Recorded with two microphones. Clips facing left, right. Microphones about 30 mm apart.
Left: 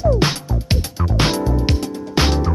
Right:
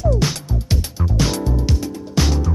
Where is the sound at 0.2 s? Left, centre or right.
Left.